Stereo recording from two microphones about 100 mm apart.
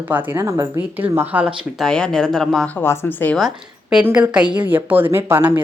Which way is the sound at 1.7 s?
5° left (ahead or behind).